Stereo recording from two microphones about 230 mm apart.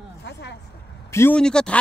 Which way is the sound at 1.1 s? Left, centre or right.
Centre.